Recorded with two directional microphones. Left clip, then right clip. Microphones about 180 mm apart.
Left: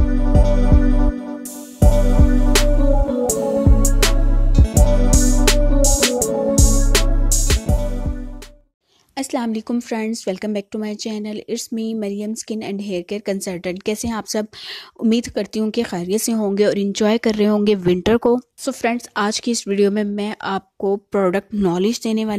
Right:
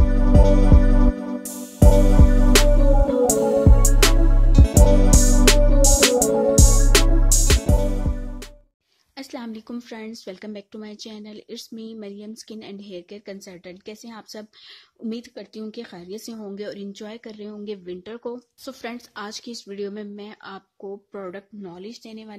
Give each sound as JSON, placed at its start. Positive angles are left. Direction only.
{"t": 0.0, "sound": "music", "side_deg": 0}
{"t": 9.1, "sound": "speech", "side_deg": 40}
{"t": 18.7, "sound": "speech", "side_deg": 35}